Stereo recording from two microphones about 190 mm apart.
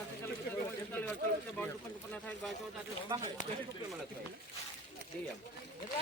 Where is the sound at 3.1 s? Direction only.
20° right (ahead or behind).